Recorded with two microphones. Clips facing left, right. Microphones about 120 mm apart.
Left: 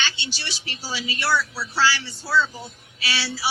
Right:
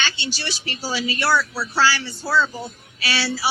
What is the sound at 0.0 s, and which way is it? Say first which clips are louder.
A man's voice: right 3 dB; 45° right (ahead or behind).